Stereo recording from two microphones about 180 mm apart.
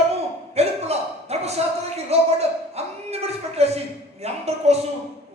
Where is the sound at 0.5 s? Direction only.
35° right (ahead or behind).